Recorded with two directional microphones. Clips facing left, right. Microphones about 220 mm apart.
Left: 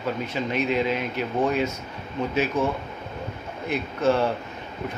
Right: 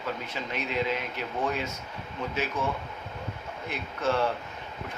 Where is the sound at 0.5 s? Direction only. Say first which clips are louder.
Left 5 dB; 15° left (ahead or behind).